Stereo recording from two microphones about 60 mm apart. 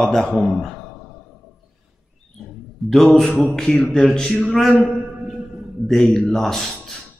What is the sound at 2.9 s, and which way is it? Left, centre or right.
A man's voice, centre.